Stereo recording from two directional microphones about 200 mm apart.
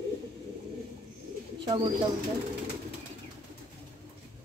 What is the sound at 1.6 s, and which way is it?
Speech, 20° right (ahead or behind).